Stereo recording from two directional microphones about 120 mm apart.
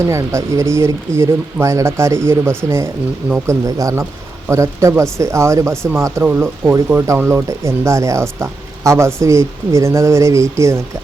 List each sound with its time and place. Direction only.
0.1 s speech: 25° right (ahead or behind)